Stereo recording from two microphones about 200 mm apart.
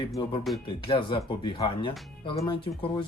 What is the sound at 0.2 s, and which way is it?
Speech, 25° left (ahead or behind).